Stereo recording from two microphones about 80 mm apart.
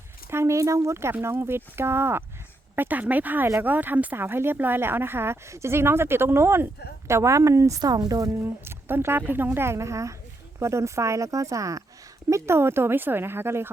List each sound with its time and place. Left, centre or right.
0.3 s speech: right
7.8 s speech: right
8.4 s speech: right
12.3 s speech: right